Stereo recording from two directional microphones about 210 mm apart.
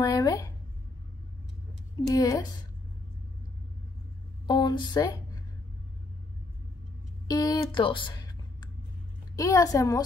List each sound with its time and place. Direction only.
0.0 s speech: 20° left (ahead or behind)
2.0 s a woman's voice: 15° left (ahead or behind)
4.5 s speech: 20° left (ahead or behind)
7.2 s a woman's voice: 20° left (ahead or behind)